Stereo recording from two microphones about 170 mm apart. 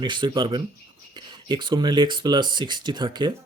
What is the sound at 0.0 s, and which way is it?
Speech, 25° right (ahead or behind).